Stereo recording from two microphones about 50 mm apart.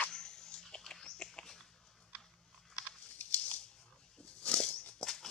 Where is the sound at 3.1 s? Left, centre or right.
Left.